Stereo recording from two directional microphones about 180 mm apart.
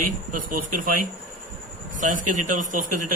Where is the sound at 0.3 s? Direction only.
50° right (ahead or behind).